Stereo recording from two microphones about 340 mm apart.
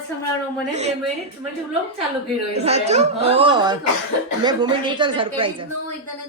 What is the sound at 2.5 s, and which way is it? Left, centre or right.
Speech, centre.